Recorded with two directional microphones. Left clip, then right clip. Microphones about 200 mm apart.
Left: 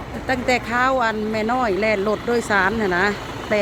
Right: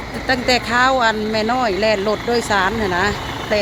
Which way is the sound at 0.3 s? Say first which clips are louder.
Right 3 dB; 10° left (ahead or behind).